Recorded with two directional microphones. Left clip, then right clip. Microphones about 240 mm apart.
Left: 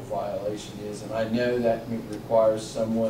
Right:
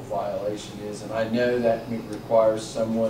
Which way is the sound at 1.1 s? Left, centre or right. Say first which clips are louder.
Right 2 dB; centre.